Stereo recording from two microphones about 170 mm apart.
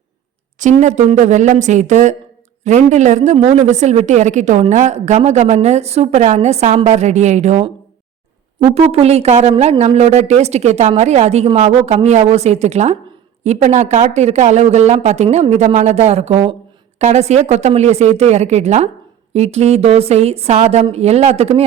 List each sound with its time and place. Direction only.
0.6 s a woman's voice: 45° right (ahead or behind)